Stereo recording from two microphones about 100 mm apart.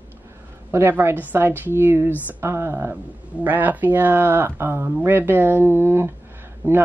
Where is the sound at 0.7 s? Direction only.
25° right (ahead or behind).